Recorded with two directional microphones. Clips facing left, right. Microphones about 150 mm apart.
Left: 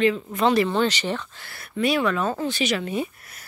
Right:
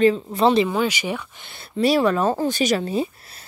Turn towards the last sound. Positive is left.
turn(degrees=-30)  # may be behind; listen again after turning